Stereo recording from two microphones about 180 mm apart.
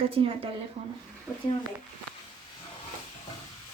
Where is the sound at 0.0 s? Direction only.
30° right (ahead or behind).